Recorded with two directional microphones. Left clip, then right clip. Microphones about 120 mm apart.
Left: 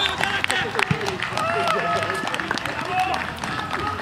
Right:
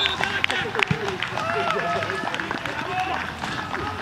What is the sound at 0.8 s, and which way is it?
Run, 20° left (ahead or behind).